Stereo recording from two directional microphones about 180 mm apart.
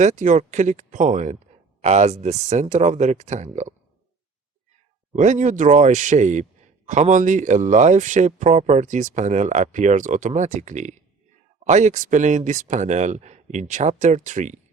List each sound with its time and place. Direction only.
0.0 s speech: 40° right (ahead or behind)
5.1 s speech: 40° right (ahead or behind)